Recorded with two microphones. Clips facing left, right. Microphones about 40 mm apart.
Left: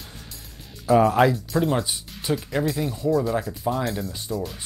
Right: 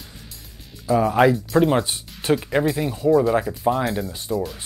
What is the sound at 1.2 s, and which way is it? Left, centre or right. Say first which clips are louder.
Speech: right 3 dB; centre.